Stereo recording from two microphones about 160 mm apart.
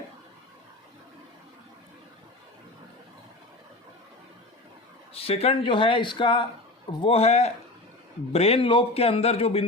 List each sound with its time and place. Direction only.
5.1 s a man's voice: 40° left (ahead or behind)